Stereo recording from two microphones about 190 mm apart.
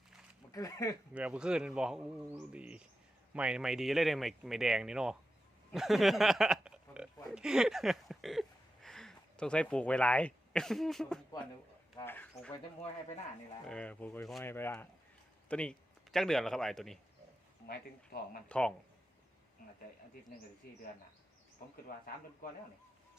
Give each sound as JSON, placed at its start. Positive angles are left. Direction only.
{"t": 0.5, "sound": "speech", "side_deg": 15}
{"t": 1.1, "sound": "speech", "side_deg": -5}
{"t": 18.1, "sound": "speech", "side_deg": 55}
{"t": 18.4, "sound": "speech", "side_deg": 5}